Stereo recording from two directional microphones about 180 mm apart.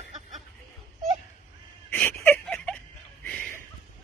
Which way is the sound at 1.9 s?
10° left (ahead or behind).